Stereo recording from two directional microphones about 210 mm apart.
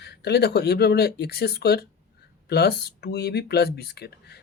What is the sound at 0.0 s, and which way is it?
Speech, 50° left (ahead or behind).